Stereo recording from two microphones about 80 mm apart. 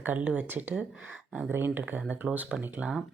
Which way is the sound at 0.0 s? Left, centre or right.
Right.